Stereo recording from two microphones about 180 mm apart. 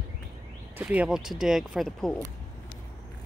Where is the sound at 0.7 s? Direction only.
5° right (ahead or behind).